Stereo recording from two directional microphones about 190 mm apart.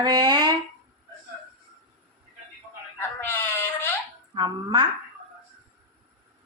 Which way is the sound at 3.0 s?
10° left (ahead or behind).